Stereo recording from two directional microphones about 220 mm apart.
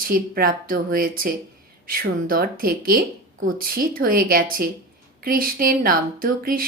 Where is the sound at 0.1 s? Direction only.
40° right (ahead or behind).